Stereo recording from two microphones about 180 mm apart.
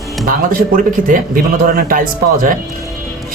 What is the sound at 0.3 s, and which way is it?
A man's voice, 50° right (ahead or behind).